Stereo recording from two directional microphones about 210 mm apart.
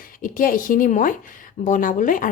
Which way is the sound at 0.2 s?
40° left (ahead or behind).